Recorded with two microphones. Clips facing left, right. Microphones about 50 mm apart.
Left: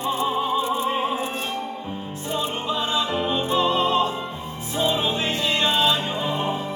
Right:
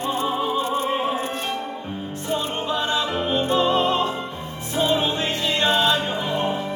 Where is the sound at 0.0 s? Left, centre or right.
Right.